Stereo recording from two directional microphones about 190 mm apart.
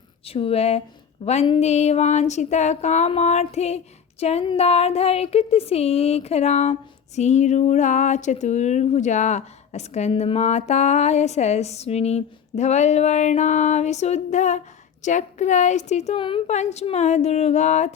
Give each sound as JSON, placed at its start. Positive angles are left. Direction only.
{"t": 0.3, "sound": "speech", "side_deg": 30}